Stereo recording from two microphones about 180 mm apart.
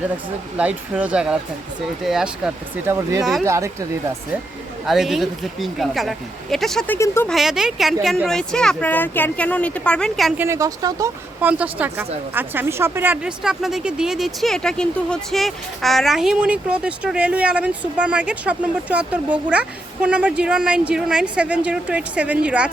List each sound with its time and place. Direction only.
0.5 s speech: 5° right (ahead or behind)
2.9 s speech: 15° right (ahead or behind)
4.9 s speech: centre (ahead or behind)
7.3 s speech: centre (ahead or behind)
10.4 s speech: 15° right (ahead or behind)
11.3 s speech: 10° right (ahead or behind)